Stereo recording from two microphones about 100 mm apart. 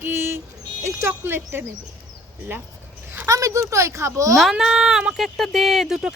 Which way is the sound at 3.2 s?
35° right (ahead or behind).